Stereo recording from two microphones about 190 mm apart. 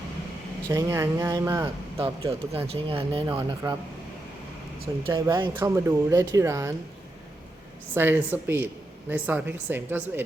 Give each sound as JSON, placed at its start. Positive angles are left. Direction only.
{"t": 0.7, "sound": "speech", "side_deg": -15}
{"t": 5.0, "sound": "speech", "side_deg": -15}
{"t": 7.9, "sound": "speech", "side_deg": -10}